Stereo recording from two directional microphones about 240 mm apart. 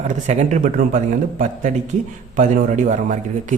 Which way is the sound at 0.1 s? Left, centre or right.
Right.